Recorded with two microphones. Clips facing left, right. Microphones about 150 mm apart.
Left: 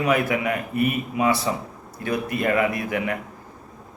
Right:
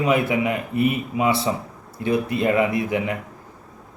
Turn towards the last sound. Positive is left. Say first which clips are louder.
# right 2 dB
turn(degrees=-20)  # may be behind; listen again after turning